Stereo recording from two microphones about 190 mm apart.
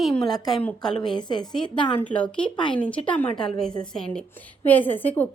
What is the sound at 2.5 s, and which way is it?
Speech, 25° left (ahead or behind).